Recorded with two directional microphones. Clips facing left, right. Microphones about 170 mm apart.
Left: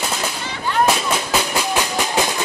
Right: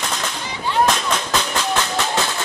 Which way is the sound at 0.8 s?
10° left (ahead or behind).